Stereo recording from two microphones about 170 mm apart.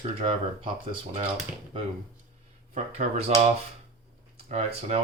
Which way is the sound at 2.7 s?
40° right (ahead or behind).